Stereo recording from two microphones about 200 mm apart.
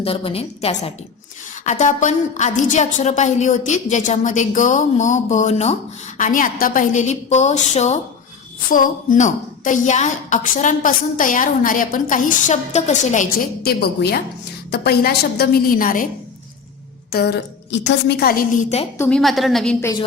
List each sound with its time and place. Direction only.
0.0 s a woman's voice: 30° left (ahead or behind)
13.6 s a woman's voice: 50° left (ahead or behind)
17.1 s a woman's voice: 55° left (ahead or behind); by 18.9 s 35° left (ahead or behind)
18.9 s a woman's voice: 5° left (ahead or behind)